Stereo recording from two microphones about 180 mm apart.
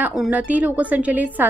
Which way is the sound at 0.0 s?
5° right (ahead or behind).